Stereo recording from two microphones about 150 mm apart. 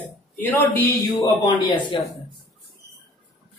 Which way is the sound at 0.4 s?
10° left (ahead or behind).